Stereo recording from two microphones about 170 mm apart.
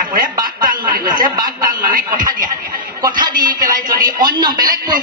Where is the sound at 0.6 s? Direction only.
55° right (ahead or behind).